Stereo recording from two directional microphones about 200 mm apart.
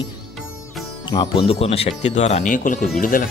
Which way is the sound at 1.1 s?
25° left (ahead or behind).